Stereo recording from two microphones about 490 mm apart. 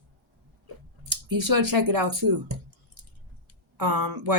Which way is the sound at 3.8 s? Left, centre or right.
Right.